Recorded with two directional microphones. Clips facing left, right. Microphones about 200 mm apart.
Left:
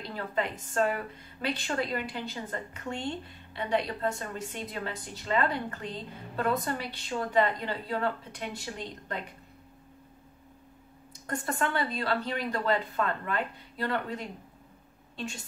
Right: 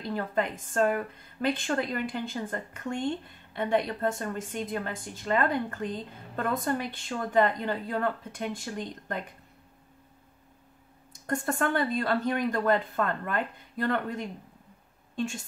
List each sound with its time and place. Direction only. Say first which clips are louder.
0.1 s a woman's voice: right 3 dB; 50° right (ahead or behind)
11.2 s a woman's voice: right 3 dB; 45° right (ahead or behind)